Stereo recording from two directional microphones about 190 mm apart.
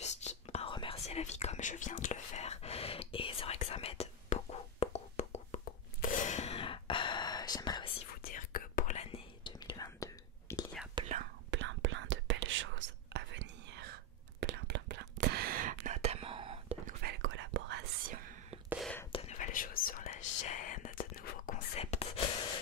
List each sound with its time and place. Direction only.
0.0 s whispering: 35° left (ahead or behind)
8.2 s whispering: 50° left (ahead or behind); by 10.6 s 20° left (ahead or behind)
11.0 s whispering: 25° right (ahead or behind)
11.5 s whispering: 75° right (ahead or behind); by 16.7 s 30° right (ahead or behind)
16.8 s whispering: 55° right (ahead or behind)
17.2 s whispering: 80° right; by 18.3 s 50° right (ahead or behind)
19.1 s whispering: 40° left (ahead or behind)
21.7 s whispering: 35° left (ahead or behind)